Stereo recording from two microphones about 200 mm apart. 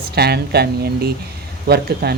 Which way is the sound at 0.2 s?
55° right (ahead or behind).